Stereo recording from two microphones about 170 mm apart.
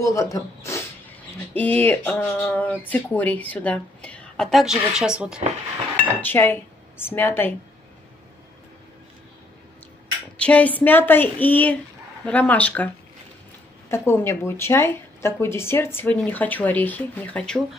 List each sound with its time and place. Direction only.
0.0 s a woman's voice: 20° left (ahead or behind); by 5.4 s 5° right (ahead or behind)
6.2 s a woman's voice: 10° left (ahead or behind)
10.3 s a woman's voice: 10° left (ahead or behind)